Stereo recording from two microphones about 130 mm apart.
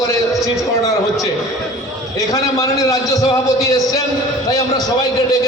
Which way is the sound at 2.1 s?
25° left (ahead or behind).